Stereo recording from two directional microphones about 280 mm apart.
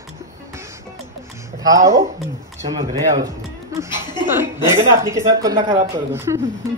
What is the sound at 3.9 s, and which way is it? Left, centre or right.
Speech, centre.